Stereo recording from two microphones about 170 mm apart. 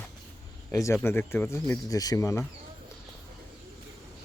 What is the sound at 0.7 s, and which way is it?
Speech, 20° left (ahead or behind).